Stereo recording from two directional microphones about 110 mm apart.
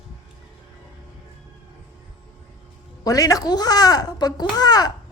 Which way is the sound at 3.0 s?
35° left (ahead or behind).